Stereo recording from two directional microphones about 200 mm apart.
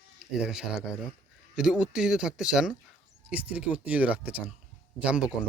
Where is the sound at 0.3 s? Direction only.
5° right (ahead or behind).